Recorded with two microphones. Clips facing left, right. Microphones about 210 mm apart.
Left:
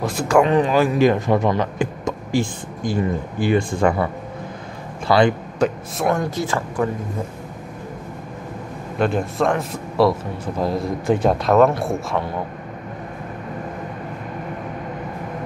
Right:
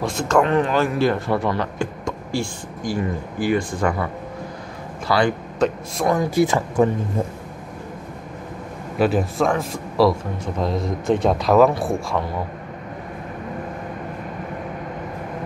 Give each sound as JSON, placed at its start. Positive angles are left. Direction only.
{"t": 0.0, "sound": "a man's voice", "side_deg": 5}
{"t": 5.0, "sound": "speech", "side_deg": 25}
{"t": 5.6, "sound": "a man's voice", "side_deg": 5}
{"t": 6.3, "sound": "speech", "side_deg": -20}
{"t": 8.9, "sound": "a man's voice", "side_deg": -5}